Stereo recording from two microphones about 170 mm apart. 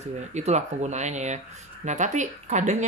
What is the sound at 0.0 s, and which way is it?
Speech, 40° right (ahead or behind).